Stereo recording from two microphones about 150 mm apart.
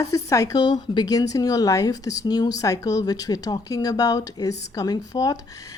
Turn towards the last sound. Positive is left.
turn(degrees=25)  # may be behind; listen again after turning